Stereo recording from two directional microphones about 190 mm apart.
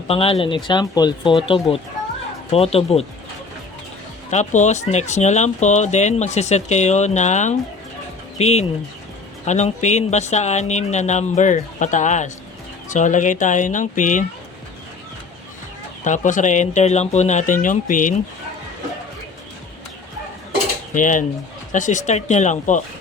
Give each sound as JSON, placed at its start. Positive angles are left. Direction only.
{"t": 0.1, "sound": "speech", "side_deg": 30}
{"t": 4.3, "sound": "speech", "side_deg": 40}
{"t": 16.0, "sound": "speech", "side_deg": 40}
{"t": 20.9, "sound": "a sound", "side_deg": 40}
{"t": 21.7, "sound": "speech", "side_deg": 40}